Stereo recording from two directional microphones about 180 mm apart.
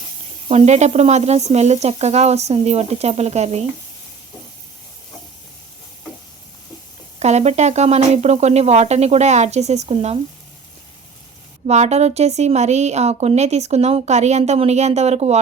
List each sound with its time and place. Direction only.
0.4 s speech: 35° right (ahead or behind)
7.2 s speech: 40° right (ahead or behind)
11.6 s speech: 40° right (ahead or behind)